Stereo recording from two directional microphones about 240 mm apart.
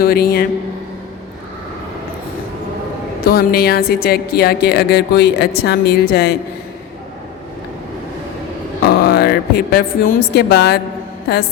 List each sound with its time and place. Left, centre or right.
0.0 s a woman's voice: left
3.2 s a woman's voice: left
8.8 s speech: left